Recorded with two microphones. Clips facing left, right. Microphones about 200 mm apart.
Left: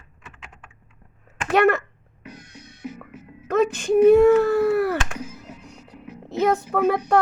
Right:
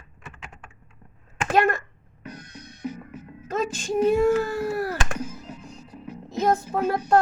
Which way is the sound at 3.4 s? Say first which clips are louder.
Left 7 dB; 60° left (ahead or behind).